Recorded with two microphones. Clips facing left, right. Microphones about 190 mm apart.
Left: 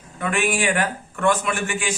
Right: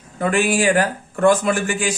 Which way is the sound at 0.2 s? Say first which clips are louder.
Right 5 dB; 35° right (ahead or behind).